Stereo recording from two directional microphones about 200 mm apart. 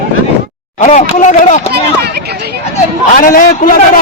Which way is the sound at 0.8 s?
35° left (ahead or behind).